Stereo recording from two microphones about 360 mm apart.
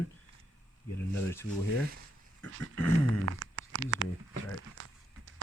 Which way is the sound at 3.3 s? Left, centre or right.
Right.